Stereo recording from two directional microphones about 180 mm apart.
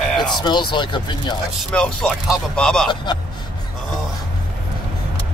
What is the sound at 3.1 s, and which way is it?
Speech, 25° left (ahead or behind).